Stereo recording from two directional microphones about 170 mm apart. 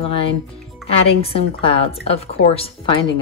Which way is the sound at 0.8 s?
35° left (ahead or behind).